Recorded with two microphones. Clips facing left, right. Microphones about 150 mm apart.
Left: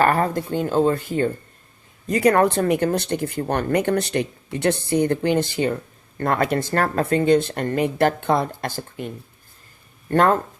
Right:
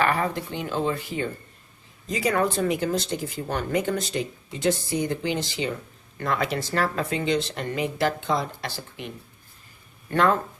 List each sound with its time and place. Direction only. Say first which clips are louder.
0.0 s speech: left 5 dB; 45° left (ahead or behind)